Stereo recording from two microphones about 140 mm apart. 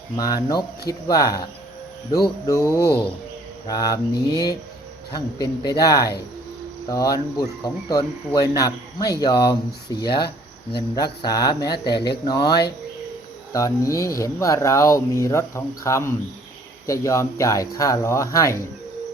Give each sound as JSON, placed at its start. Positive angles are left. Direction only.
{"t": 0.2, "sound": "speech", "side_deg": 30}
{"t": 2.5, "sound": "speech", "side_deg": 25}